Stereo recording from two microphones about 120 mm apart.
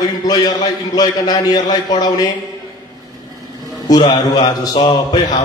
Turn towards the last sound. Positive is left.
turn(degrees=35)  # may be behind; listen again after turning